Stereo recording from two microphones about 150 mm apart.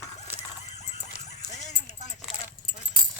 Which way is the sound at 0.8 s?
50° left (ahead or behind).